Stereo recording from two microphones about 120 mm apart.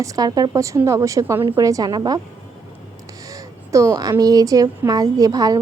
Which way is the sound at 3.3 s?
25° right (ahead or behind).